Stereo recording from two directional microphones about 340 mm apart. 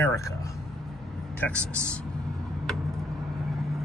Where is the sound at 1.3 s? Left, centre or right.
Centre.